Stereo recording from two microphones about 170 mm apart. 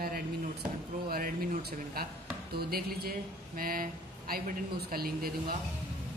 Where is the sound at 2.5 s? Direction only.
65° right (ahead or behind).